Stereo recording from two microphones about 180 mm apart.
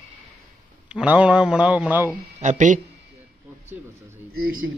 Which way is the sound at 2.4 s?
45° right (ahead or behind).